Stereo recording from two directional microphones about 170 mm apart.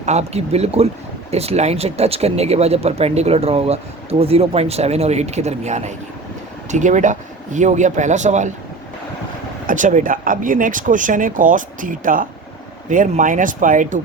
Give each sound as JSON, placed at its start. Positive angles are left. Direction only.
{"t": 0.0, "sound": "speech", "side_deg": -40}
{"t": 9.6, "sound": "speech", "side_deg": -50}